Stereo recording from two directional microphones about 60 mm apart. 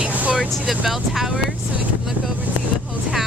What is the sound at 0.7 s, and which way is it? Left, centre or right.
Speech, centre.